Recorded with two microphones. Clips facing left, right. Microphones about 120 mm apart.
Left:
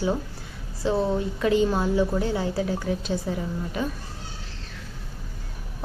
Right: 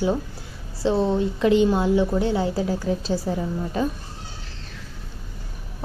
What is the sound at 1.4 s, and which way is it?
A woman's voice, 25° right (ahead or behind).